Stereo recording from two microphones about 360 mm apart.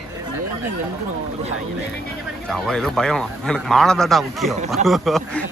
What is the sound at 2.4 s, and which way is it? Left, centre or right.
Speech, centre.